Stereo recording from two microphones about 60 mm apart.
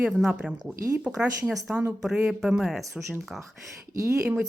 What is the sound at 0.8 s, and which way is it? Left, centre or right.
Speech, right.